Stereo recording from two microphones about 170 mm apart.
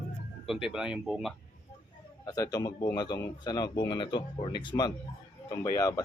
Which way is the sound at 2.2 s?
20° left (ahead or behind).